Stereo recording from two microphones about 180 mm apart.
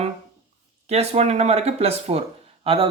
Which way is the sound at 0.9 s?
35° right (ahead or behind).